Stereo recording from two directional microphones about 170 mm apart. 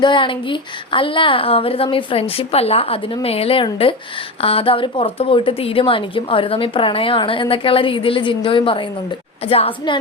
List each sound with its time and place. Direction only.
0.0 s a woman's voice: 30° left (ahead or behind)